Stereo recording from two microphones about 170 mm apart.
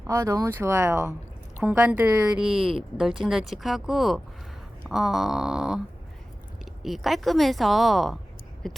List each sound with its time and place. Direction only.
0.1 s speech: 15° right (ahead or behind)
2.3 s speech: 5° right (ahead or behind)
6.8 s speech: centre (ahead or behind)